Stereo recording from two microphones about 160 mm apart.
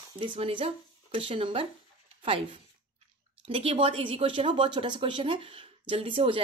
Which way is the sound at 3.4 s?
35° right (ahead or behind).